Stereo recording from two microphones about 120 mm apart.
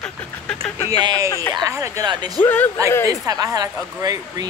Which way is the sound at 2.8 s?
25° right (ahead or behind).